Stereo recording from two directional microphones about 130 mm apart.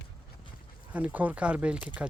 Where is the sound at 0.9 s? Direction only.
10° right (ahead or behind).